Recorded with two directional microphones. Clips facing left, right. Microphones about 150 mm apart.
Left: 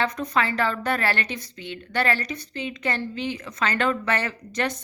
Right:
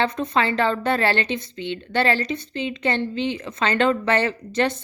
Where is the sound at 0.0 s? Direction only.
25° right (ahead or behind).